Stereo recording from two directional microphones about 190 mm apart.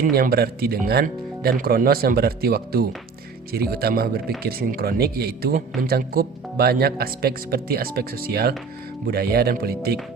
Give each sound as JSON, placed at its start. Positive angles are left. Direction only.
{"t": 0.0, "sound": "speech", "side_deg": -50}